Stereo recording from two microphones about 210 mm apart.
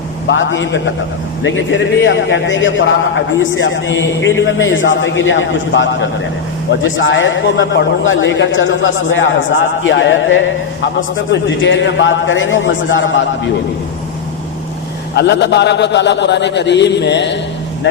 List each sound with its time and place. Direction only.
0.3 s a man's voice: 65° left (ahead or behind)
15.1 s a man's voice: 55° left (ahead or behind)